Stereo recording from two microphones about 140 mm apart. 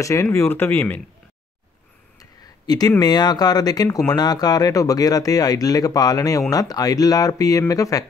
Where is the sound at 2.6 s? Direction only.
30° left (ahead or behind).